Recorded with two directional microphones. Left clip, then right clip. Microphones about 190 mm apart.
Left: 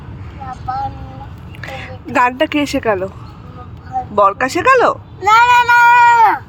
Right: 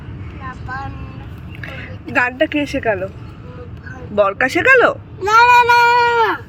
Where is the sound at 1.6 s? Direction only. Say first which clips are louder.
Left 3 dB; 25° left (ahead or behind).